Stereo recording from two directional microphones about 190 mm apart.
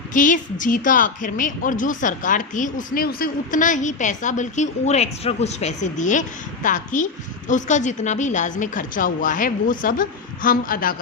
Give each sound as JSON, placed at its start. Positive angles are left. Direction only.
{"t": 0.1, "sound": "speech", "side_deg": 45}